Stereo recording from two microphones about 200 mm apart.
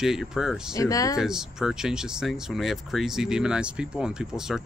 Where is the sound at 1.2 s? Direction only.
5° right (ahead or behind).